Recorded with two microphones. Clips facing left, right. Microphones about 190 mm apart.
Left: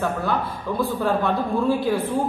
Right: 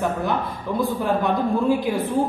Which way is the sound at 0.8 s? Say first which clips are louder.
Even; 15° right (ahead or behind).